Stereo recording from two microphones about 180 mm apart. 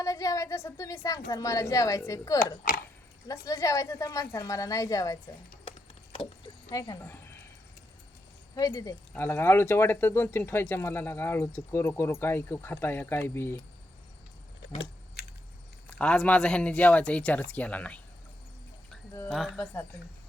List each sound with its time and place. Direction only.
0.0 s a woman's voice: 20° left (ahead or behind)
2.4 s speech: 50° left (ahead or behind)
3.2 s a woman's voice: 20° left (ahead or behind)
8.5 s speech: 20° left (ahead or behind)
15.9 s speech: 5° left (ahead or behind)
19.3 s speech: centre (ahead or behind)